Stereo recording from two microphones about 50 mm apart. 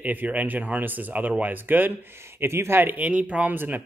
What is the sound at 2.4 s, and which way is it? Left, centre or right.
Speech, right.